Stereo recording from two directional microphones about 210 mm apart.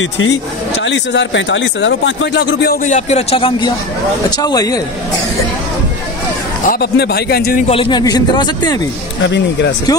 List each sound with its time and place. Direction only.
0.0 s speech: 60° left (ahead or behind); by 4.8 s 15° left (ahead or behind)
6.6 s a man's voice: 45° left (ahead or behind)
7.6 s speech: 25° left (ahead or behind)
9.2 s speech: 55° left (ahead or behind)